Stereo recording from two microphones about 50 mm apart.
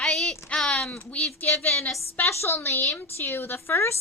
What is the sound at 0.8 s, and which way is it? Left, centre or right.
Speech, left.